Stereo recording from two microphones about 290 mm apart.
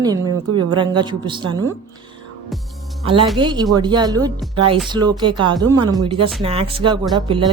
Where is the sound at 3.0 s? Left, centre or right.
Centre.